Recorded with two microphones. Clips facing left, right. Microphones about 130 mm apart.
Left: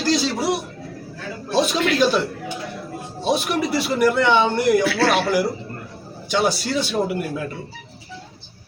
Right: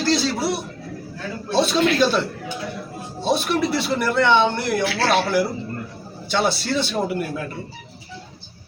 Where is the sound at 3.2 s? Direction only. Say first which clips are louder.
Right 1 dB; 10° left (ahead or behind).